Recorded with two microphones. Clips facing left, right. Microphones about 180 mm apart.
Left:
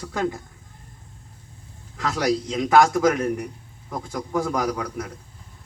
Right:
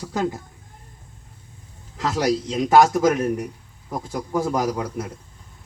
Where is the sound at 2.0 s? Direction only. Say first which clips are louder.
Right 1 dB; 25° right (ahead or behind).